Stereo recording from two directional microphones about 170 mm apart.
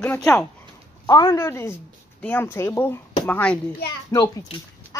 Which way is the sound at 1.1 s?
20° left (ahead or behind).